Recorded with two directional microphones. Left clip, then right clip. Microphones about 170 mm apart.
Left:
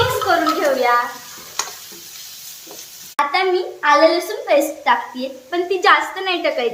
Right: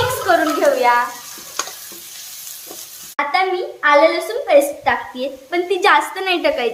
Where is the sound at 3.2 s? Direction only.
20° right (ahead or behind).